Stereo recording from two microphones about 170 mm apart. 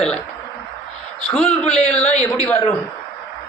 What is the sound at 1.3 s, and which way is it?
Speech, 5° left (ahead or behind).